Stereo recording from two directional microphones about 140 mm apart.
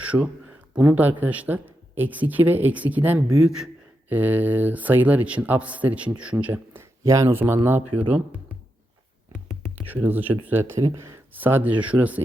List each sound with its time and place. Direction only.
0.0 s a sound: 10° right (ahead or behind)
0.7 s speech: 10° right (ahead or behind)
7.0 s speech: 25° right (ahead or behind)
9.7 s speech: 15° right (ahead or behind)